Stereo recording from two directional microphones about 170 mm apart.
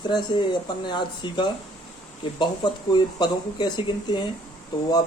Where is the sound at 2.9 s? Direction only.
25° left (ahead or behind).